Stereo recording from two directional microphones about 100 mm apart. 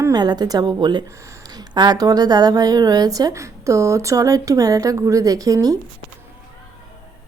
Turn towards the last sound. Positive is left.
turn(degrees=-40)  # may be behind; listen again after turning